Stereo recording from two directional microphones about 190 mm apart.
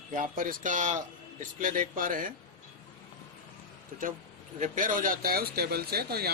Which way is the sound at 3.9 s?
45° right (ahead or behind).